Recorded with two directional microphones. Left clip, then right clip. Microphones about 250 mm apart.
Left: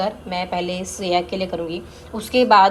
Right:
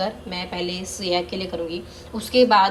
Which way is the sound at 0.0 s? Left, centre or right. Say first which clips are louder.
Left 4 dB; centre.